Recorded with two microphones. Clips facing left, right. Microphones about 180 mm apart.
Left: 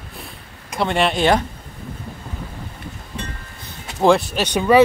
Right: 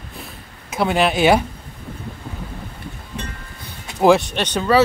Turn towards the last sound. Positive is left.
turn(degrees=10)  # may be behind; listen again after turning